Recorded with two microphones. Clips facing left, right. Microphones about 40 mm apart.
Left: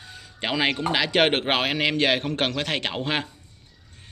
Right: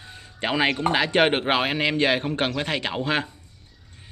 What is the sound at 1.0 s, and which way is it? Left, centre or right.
Speech, left.